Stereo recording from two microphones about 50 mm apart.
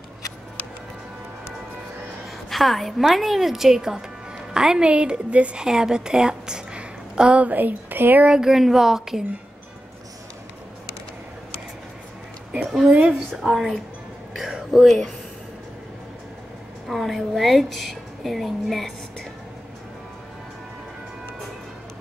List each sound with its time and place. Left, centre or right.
2.5 s a woman's voice: centre; by 5.6 s right
5.6 s a woman's voice: centre; by 8.3 s right
8.3 s speech: centre
12.8 s a woman's voice: right
13.4 s a woman's voice: centre
16.8 s a woman's voice: centre